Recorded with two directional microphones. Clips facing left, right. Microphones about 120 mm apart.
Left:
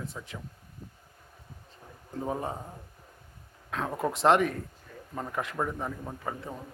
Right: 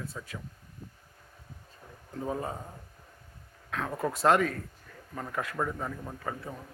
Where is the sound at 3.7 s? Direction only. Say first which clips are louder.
Left 1 dB; 20° left (ahead or behind).